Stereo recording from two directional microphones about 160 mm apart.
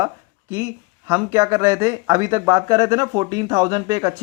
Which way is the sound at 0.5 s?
20° right (ahead or behind).